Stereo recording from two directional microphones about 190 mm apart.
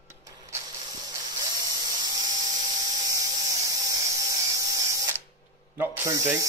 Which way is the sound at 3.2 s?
20° right (ahead or behind).